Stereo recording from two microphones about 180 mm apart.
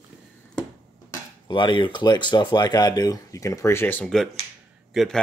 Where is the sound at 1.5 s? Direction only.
25° left (ahead or behind).